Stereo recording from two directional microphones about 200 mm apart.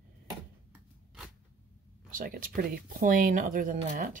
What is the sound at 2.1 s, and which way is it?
Speech, 45° right (ahead or behind).